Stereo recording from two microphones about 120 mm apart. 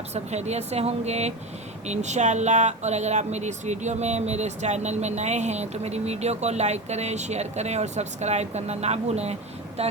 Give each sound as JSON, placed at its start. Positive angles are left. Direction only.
{"t": 0.1, "sound": "speech", "side_deg": -65}
{"t": 1.9, "sound": "speech", "side_deg": -75}